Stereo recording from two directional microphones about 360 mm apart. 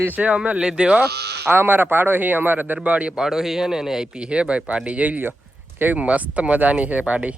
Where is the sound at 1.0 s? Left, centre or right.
Right.